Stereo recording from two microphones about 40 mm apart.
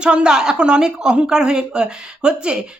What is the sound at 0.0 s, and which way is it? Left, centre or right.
Speech, right.